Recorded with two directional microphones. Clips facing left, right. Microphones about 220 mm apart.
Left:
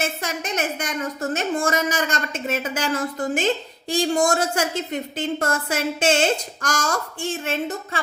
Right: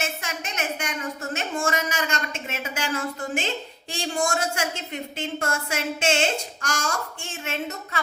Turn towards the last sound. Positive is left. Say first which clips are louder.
# left 5 dB
turn(degrees=35)  # may be behind; listen again after turning